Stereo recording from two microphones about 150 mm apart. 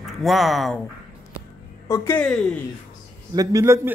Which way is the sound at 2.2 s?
5° left (ahead or behind).